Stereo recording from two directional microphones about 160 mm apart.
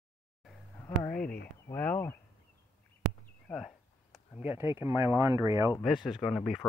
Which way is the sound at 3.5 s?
5° right (ahead or behind).